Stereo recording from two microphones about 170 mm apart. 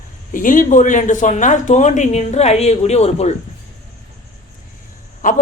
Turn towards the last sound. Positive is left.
turn(degrees=50)  # may be behind; listen again after turning